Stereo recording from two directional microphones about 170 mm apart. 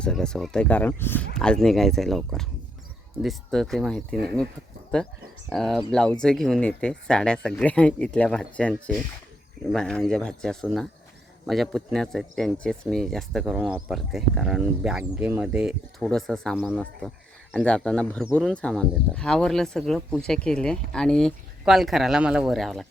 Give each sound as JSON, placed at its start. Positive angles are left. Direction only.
{"t": 0.0, "sound": "speech", "side_deg": 5}